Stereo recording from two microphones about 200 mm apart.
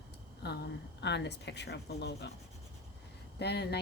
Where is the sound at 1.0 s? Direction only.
60° left (ahead or behind).